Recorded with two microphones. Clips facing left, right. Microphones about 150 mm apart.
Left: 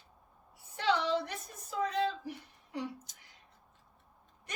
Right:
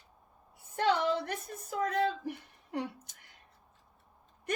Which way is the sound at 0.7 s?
50° right (ahead or behind).